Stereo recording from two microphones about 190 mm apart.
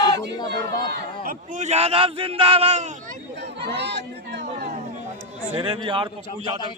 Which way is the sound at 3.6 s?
65° right (ahead or behind).